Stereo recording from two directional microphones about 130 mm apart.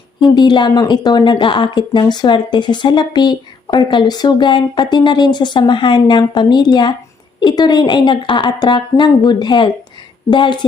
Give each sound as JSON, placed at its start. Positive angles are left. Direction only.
{"t": 0.3, "sound": "speech", "side_deg": 35}